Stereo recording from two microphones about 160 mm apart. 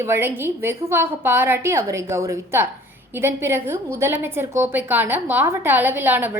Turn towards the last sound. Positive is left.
turn(degrees=-10)  # may be behind; listen again after turning